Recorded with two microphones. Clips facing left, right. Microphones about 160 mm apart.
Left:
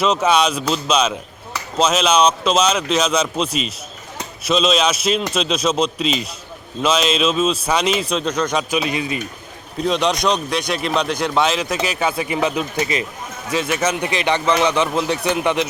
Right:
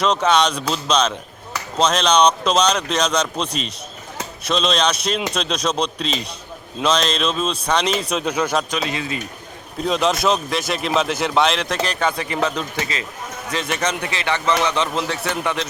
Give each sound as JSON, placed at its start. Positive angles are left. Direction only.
{"t": 0.0, "sound": "speech", "side_deg": 5}
{"t": 8.7, "sound": "speech", "side_deg": 10}
{"t": 9.7, "sound": "speech", "side_deg": 0}
{"t": 14.0, "sound": "speech", "side_deg": 20}